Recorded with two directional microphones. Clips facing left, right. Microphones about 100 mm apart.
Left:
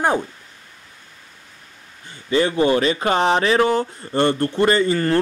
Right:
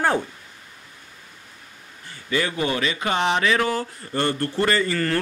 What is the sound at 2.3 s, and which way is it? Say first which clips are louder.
Speech: left 7 dB; 30° left (ahead or behind).